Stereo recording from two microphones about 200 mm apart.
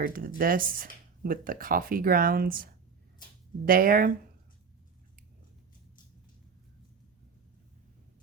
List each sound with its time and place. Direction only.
0.0 s speech: 45° right (ahead or behind)
3.7 s speech: 45° right (ahead or behind)